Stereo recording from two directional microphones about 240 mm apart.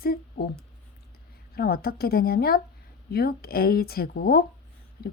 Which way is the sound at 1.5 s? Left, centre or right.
Left.